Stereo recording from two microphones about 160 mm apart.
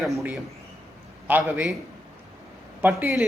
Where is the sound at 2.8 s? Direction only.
15° right (ahead or behind).